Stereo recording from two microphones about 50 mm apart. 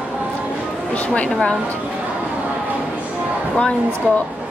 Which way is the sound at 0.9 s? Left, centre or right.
Left.